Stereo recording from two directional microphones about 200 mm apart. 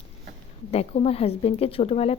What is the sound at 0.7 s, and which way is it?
Speech, 30° left (ahead or behind).